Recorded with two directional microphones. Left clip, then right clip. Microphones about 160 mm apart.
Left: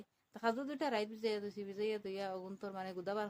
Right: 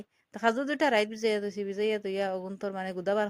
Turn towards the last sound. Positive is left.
turn(degrees=-40)  # may be behind; listen again after turning